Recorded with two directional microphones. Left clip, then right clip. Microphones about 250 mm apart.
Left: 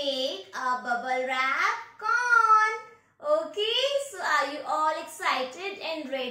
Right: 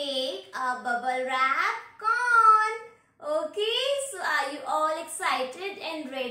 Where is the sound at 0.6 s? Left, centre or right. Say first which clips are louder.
Even; centre.